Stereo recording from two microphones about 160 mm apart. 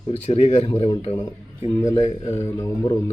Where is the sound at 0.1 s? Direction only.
40° left (ahead or behind).